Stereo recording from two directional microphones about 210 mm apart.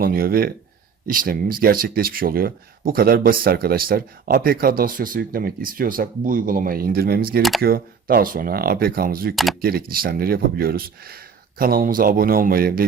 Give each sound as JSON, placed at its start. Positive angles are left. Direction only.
{"t": 0.0, "sound": "speech", "side_deg": -45}
{"t": 9.3, "sound": "speech", "side_deg": 0}
{"t": 9.6, "sound": "speech", "side_deg": -45}